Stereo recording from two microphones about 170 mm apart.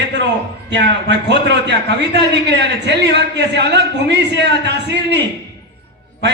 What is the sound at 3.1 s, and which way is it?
Speech, 90° right.